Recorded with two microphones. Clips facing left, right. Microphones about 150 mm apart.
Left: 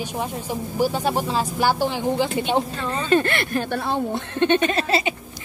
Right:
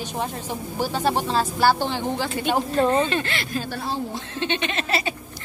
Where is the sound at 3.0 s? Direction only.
50° left (ahead or behind).